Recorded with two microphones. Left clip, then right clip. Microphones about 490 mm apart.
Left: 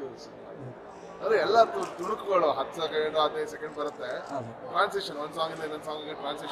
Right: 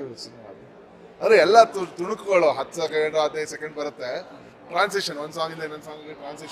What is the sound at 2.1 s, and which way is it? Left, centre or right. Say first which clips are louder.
A man's voice: right 6 dB; right.